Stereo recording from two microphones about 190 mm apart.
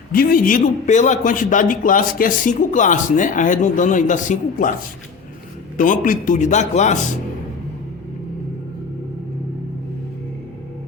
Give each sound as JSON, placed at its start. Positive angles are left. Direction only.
{"t": 0.1, "sound": "a man's voice", "side_deg": 50}
{"t": 5.7, "sound": "a man's voice", "side_deg": 45}